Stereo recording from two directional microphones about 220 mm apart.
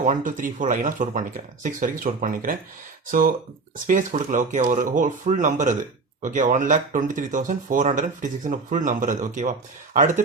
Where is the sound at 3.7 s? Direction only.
35° right (ahead or behind).